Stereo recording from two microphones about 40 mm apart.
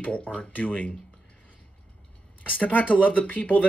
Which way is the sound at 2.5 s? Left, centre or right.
Left.